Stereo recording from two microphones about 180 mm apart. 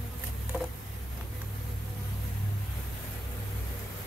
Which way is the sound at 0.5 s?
5° right (ahead or behind).